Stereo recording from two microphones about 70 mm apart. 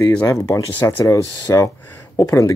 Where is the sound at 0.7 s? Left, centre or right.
Left.